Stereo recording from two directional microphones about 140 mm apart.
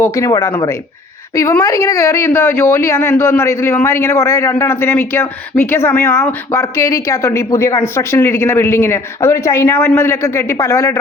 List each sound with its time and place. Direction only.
0.0 s a woman's voice: 25° left (ahead or behind)